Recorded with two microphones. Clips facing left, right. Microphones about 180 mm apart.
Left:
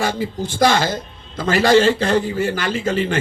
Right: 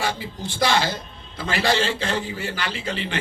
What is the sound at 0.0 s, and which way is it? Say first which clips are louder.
A man's voice: left 6 dB; 45° left (ahead or behind).